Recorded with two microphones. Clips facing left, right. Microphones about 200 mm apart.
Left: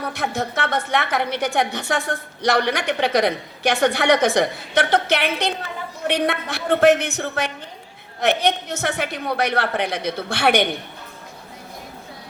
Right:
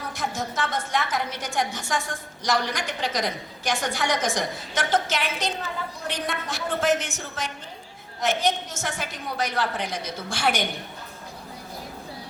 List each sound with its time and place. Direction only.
0.0 s a woman's voice: 65° left (ahead or behind)